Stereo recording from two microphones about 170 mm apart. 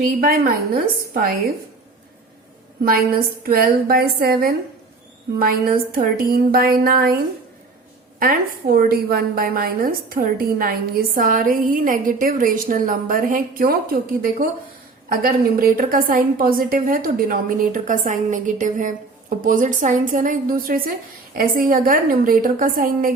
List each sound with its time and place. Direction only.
0.2 s a woman's voice: 60° right (ahead or behind)
3.4 s a woman's voice: 60° right (ahead or behind)
8.2 s a woman's voice: 60° right (ahead or behind)